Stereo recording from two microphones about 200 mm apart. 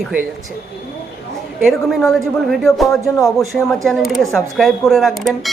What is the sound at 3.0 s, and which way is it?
Speech, 15° left (ahead or behind).